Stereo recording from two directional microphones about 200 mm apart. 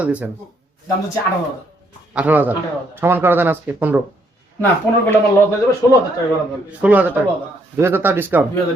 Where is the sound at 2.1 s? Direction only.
5° right (ahead or behind).